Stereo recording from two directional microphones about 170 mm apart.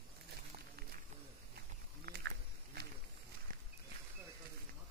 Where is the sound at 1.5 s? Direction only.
75° right (ahead or behind).